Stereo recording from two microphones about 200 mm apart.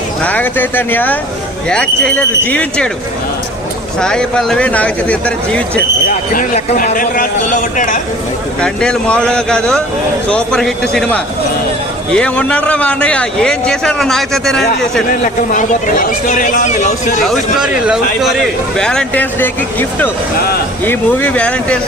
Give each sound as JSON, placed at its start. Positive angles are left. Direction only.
{"t": 0.2, "sound": "a man's voice", "side_deg": 10}
{"t": 4.0, "sound": "a man's voice", "side_deg": 5}
{"t": 6.3, "sound": "speech", "side_deg": 45}
{"t": 8.6, "sound": "a man's voice", "side_deg": 5}
{"t": 15.1, "sound": "speech", "side_deg": 40}
{"t": 17.2, "sound": "a man's voice", "side_deg": -5}